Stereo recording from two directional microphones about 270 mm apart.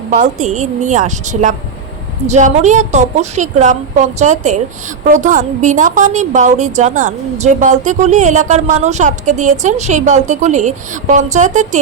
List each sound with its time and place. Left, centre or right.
0.1 s a woman's voice: right